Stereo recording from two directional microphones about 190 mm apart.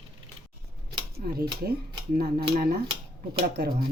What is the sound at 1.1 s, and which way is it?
Speech, 55° right (ahead or behind).